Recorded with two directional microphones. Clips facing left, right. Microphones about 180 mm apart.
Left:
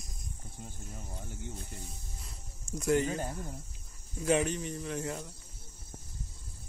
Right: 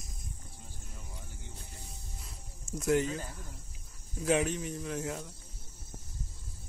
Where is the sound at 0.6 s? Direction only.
55° left (ahead or behind).